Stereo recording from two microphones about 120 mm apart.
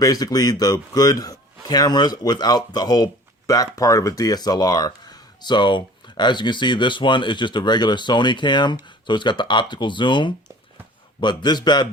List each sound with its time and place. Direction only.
0.0 s speech: 30° left (ahead or behind)